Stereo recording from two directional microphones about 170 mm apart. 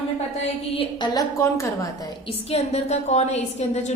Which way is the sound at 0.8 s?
25° left (ahead or behind).